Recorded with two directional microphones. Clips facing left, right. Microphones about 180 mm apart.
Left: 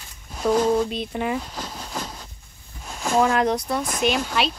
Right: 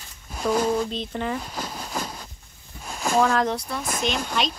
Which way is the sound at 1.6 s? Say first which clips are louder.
Right 1 dB; 10° right (ahead or behind).